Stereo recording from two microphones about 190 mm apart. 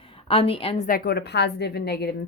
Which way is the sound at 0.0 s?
30° left (ahead or behind).